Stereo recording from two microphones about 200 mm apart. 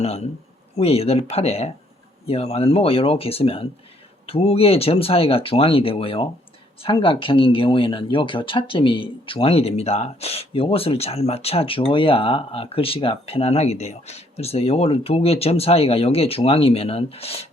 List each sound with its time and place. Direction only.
0.0 s speech: 30° left (ahead or behind)